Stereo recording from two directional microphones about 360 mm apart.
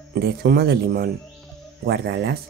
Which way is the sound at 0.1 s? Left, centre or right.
Right.